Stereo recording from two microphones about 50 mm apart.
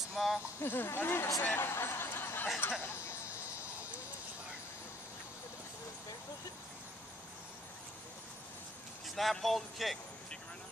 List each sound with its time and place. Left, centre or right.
0.1 s speech: centre
0.6 s speech: left
2.8 s insect: left
9.0 s speech: centre